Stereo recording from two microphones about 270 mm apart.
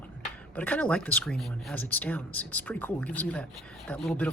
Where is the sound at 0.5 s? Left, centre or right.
Centre.